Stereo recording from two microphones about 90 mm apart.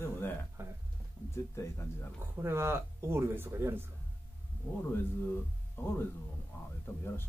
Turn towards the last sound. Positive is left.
turn(degrees=30)  # may be behind; listen again after turning